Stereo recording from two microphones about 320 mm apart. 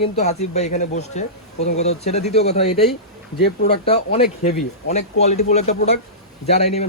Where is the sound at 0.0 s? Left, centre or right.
Left.